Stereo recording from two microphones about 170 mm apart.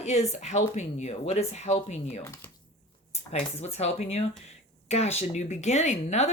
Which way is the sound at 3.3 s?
40° left (ahead or behind).